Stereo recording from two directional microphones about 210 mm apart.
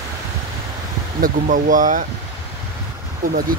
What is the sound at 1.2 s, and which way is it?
Speech, 40° right (ahead or behind).